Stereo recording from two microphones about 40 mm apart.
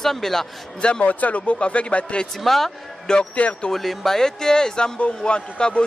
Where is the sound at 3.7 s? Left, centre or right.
Centre.